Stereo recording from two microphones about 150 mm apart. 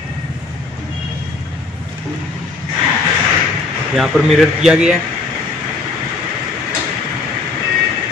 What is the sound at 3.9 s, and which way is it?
A man's voice, centre (ahead or behind).